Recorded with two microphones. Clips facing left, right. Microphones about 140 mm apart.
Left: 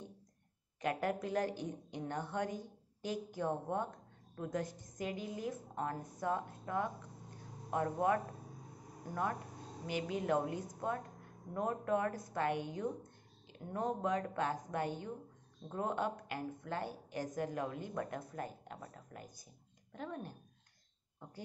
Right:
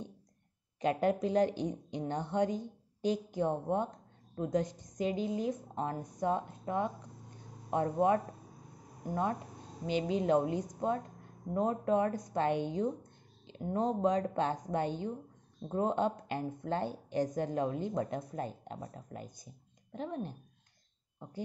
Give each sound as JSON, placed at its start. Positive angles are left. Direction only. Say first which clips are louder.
{"t": 0.7, "sound": "a woman's voice", "louder": "right 6 dB", "side_deg": -25}